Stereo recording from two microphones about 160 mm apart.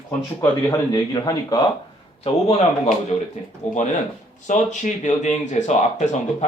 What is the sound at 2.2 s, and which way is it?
Speech, 40° left (ahead or behind).